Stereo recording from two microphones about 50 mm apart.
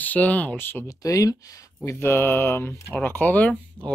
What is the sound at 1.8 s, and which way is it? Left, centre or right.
Speech, left.